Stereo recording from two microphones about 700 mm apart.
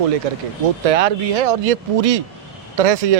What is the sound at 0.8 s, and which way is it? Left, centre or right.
Speech, right.